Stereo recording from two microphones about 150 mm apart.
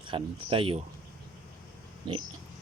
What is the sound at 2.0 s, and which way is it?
Speech, 35° right (ahead or behind).